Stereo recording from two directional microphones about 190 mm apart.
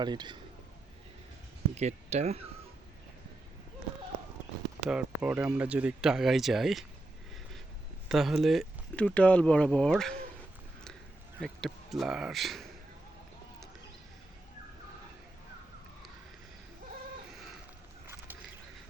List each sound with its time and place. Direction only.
0.0 s a man's voice: 25° right (ahead or behind)
1.7 s speech: 35° right (ahead or behind)
4.9 s speech: 5° right (ahead or behind)
8.0 s speech: centre (ahead or behind)
11.3 s speech: centre (ahead or behind)
18.0 s a sound: 10° right (ahead or behind)